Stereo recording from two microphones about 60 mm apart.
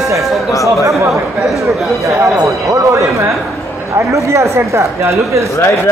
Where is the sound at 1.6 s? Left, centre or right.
Right.